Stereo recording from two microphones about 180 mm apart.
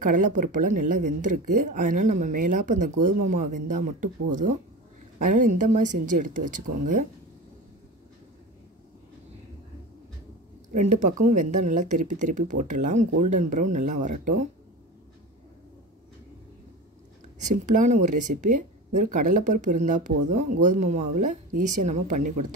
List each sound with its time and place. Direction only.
0.0 s speech: 45° right (ahead or behind)
5.3 s speech: 45° right (ahead or behind)
10.7 s speech: 45° right (ahead or behind)
17.4 s speech: 45° right (ahead or behind)